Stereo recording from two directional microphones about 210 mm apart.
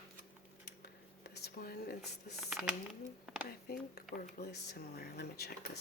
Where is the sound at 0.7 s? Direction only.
50° left (ahead or behind).